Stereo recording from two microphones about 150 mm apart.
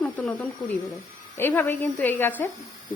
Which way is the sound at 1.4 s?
15° left (ahead or behind).